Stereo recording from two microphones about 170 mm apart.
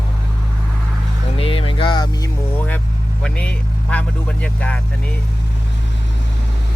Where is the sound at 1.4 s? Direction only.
35° left (ahead or behind).